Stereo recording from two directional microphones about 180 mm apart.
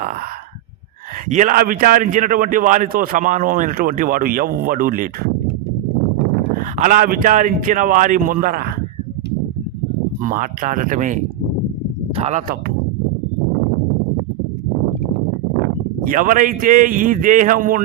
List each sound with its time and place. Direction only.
1.3 s a man's voice: 45° right (ahead or behind)
6.6 s a man's voice: 45° right (ahead or behind)
10.2 s a man's voice: 50° right (ahead or behind)
12.1 s speech: 35° right (ahead or behind)
16.0 s a man's voice: 50° right (ahead or behind)